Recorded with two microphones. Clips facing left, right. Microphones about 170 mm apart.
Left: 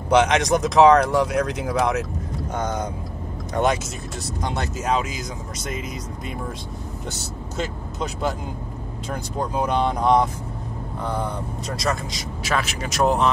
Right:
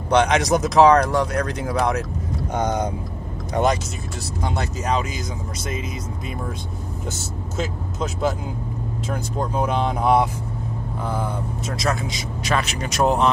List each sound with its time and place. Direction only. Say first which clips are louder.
0.1 s a man's voice: even; centre (ahead or behind)
2.5 s speech: right 4 dB; 15° right (ahead or behind)
4.4 s a man's voice: right 1 dB; centre (ahead or behind)
7.1 s speech: right 2 dB; centre (ahead or behind)
9.4 s a man's voice: left 1 dB; centre (ahead or behind)